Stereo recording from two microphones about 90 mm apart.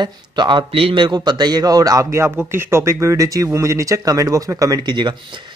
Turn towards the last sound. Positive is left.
turn(degrees=-55)  # may be behind; listen again after turning